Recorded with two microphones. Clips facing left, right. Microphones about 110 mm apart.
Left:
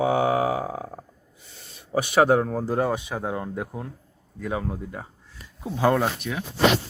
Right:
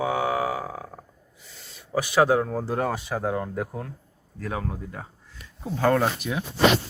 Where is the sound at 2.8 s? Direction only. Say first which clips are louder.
Even; 5° left (ahead or behind).